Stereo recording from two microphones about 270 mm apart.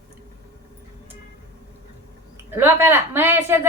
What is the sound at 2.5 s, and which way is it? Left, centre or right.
A woman's voice, centre.